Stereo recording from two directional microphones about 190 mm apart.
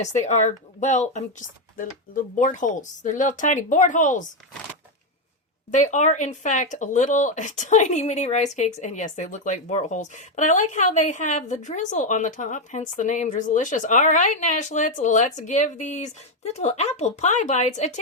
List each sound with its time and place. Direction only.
0.0 s speech: 40° left (ahead or behind)
5.7 s speech: 40° left (ahead or behind)